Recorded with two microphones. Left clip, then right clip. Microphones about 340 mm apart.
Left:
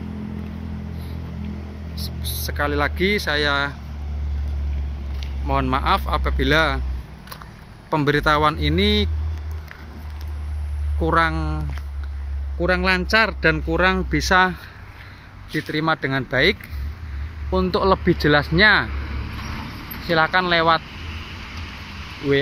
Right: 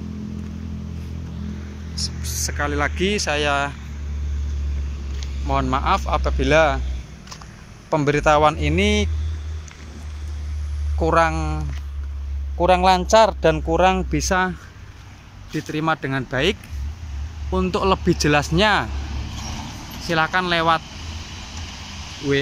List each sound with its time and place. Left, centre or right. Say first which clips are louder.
2.0 s speech: right 5 dB; centre
5.2 s speech: even; centre
7.9 s speech: right 1 dB; centre
11.0 s speech: right 1 dB; centre
12.6 s speech: right 4 dB; centre
15.5 s speech: left 1 dB; centre
20.1 s speech: left 2 dB; centre